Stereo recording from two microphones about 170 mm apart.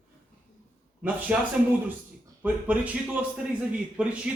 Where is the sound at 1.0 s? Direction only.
10° right (ahead or behind).